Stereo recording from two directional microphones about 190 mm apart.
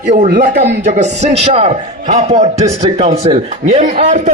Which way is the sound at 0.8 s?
40° right (ahead or behind).